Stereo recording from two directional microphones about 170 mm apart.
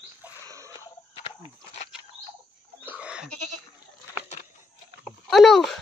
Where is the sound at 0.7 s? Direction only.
30° left (ahead or behind).